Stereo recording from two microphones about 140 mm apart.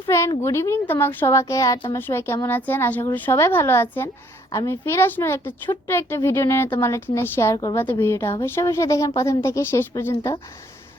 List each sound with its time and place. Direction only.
0.1 s a woman's voice: 20° left (ahead or behind)